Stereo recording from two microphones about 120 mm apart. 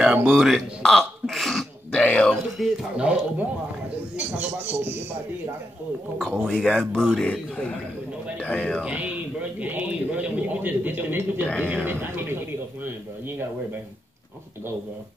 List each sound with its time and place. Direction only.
0.0 s throat clearing: 5° right (ahead or behind)
3.0 s speech: 10° right (ahead or behind)
6.4 s speech: 5° left (ahead or behind)
8.8 s a man's voice: 10° right (ahead or behind)
11.4 s speech: 10° left (ahead or behind)
11.7 s speech: 20° right (ahead or behind)